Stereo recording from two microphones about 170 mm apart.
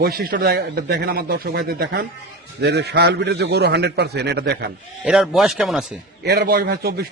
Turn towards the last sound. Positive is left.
turn(degrees=-65)  # may be behind; listen again after turning